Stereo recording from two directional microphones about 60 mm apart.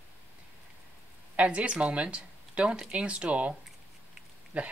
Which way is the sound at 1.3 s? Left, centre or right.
Centre.